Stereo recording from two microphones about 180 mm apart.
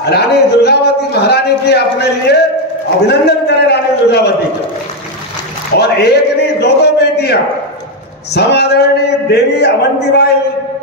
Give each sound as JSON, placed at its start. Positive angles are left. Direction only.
{"t": 0.0, "sound": "a man's voice", "side_deg": 65}
{"t": 5.8, "sound": "a man's voice", "side_deg": 65}